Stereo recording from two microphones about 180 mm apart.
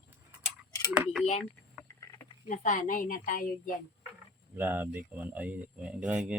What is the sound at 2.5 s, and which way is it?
A woman's voice, 45° left (ahead or behind).